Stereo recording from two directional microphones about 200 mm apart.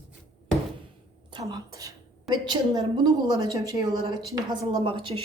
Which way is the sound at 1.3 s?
20° right (ahead or behind).